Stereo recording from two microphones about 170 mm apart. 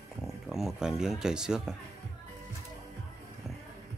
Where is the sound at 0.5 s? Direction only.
Centre (ahead or behind).